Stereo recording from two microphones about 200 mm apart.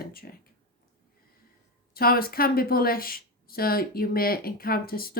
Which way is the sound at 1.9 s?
50° left (ahead or behind).